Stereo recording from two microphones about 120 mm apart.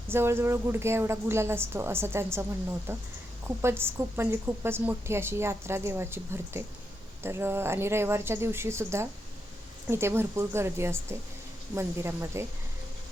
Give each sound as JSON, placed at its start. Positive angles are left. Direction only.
{"t": 0.1, "sound": "a woman's voice", "side_deg": -20}